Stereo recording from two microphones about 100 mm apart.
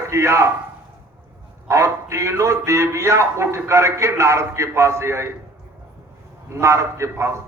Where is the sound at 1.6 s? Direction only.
30° right (ahead or behind).